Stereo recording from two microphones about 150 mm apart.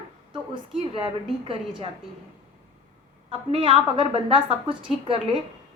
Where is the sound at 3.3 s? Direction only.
35° right (ahead or behind).